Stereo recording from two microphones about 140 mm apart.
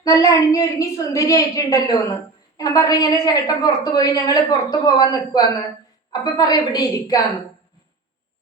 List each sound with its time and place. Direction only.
0.0 s a woman's voice: 25° left (ahead or behind)